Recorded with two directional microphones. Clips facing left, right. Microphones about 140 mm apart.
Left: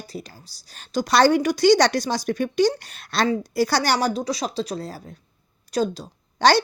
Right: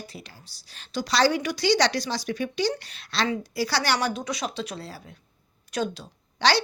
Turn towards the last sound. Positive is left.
turn(degrees=45)  # may be behind; listen again after turning